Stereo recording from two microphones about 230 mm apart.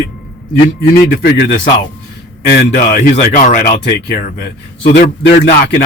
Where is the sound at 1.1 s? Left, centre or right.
Left.